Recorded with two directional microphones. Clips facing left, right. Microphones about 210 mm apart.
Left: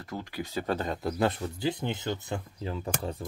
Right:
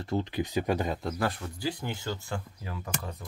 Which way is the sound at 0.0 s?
25° right (ahead or behind).